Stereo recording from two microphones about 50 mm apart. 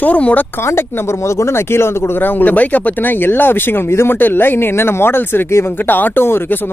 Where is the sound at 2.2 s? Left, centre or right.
Left.